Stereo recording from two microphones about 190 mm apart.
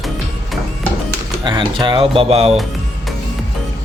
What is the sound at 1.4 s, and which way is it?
Speech, 25° right (ahead or behind).